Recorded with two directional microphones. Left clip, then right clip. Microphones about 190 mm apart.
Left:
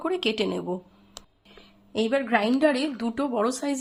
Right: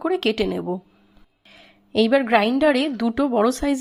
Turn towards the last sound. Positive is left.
turn(degrees=-25)  # may be behind; listen again after turning